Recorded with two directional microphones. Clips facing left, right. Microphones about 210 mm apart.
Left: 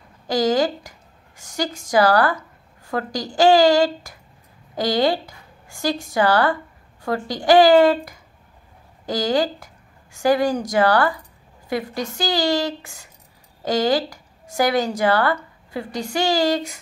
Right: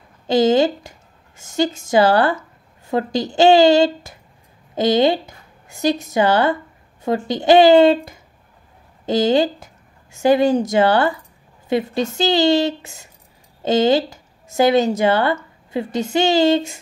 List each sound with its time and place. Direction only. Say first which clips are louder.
0.3 s a woman's voice: right 4 dB; 25° right (ahead or behind)